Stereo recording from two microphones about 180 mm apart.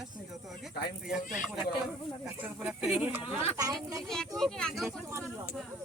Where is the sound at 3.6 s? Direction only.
20° right (ahead or behind).